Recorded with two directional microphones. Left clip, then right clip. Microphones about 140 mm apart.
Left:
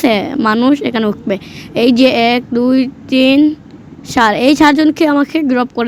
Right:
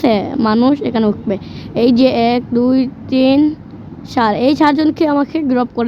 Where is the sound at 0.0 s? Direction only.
45° left (ahead or behind).